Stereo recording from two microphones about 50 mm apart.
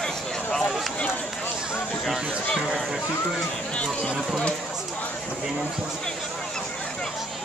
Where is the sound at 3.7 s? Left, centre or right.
Left.